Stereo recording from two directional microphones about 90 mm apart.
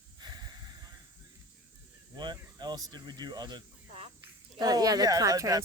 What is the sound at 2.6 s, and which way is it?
Speech, 50° right (ahead or behind).